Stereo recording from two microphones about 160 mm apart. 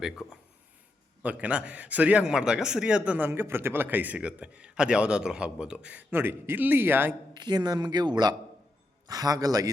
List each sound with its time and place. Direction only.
0.0 s a man's voice: centre (ahead or behind)
7.3 s speech: 25° right (ahead or behind)